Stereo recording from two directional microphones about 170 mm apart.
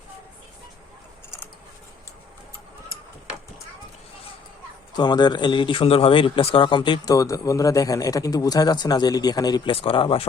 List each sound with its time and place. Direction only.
4.9 s speech: 25° left (ahead or behind)